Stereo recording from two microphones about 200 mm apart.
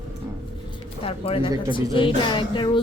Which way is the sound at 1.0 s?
30° left (ahead or behind).